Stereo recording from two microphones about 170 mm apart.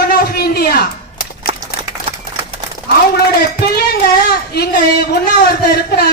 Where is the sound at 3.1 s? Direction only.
70° left (ahead or behind).